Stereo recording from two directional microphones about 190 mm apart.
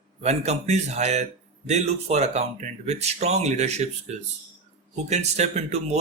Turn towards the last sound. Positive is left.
turn(degrees=-35)  # may be behind; listen again after turning